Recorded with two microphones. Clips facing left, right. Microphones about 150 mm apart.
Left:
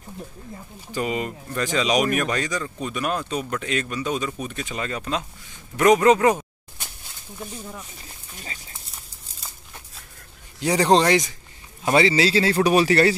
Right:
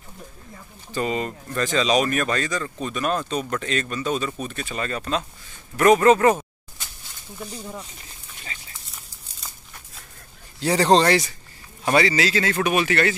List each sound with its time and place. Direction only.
0.9 s speech: 10° left (ahead or behind)
5.8 s a sound: 15° left (ahead or behind)
10.6 s a man's voice: 10° left (ahead or behind); by 13.1 s 35° left (ahead or behind)